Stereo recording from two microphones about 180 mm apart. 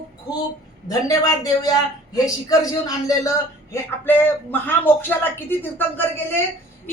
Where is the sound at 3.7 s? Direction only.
10° left (ahead or behind).